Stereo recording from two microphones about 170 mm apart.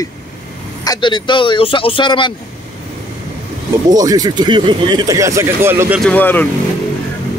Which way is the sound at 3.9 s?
20° right (ahead or behind).